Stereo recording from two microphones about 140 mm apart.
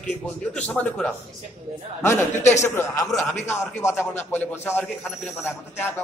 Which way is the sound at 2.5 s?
20° left (ahead or behind).